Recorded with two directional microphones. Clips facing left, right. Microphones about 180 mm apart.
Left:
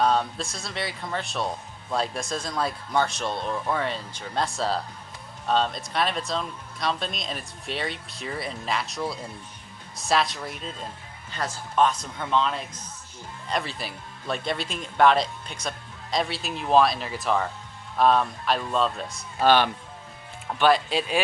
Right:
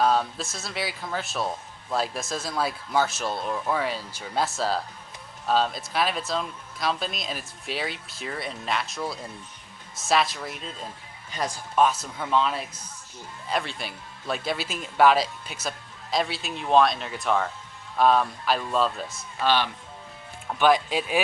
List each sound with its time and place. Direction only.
0.0 s speech: centre (ahead or behind)
11.3 s speech: 15° right (ahead or behind)
19.4 s speech: 50° left (ahead or behind)
20.6 s speech: 10° right (ahead or behind)